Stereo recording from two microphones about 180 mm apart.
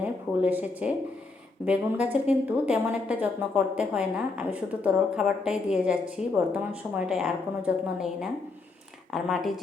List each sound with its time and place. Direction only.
0.0 s a woman's voice: 10° right (ahead or behind)